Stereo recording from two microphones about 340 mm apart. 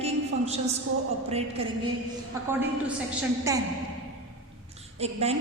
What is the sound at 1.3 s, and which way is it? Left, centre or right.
Speech, centre.